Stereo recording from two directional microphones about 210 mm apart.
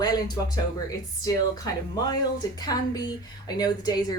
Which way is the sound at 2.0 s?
20° left (ahead or behind).